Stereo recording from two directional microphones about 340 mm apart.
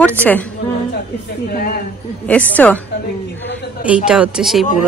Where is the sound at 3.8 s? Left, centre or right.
Centre.